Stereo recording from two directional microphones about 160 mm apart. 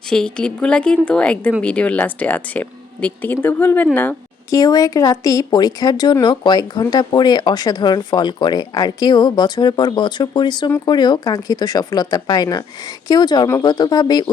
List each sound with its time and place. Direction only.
0.1 s a woman's voice: 5° left (ahead or behind)
4.5 s speech: 25° left (ahead or behind)